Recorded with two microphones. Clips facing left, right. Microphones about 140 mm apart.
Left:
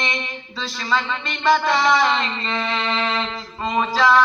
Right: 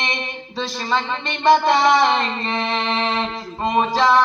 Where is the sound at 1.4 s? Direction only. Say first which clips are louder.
Right 3 dB; 25° right (ahead or behind).